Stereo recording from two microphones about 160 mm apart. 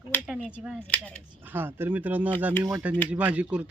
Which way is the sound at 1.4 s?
10° right (ahead or behind).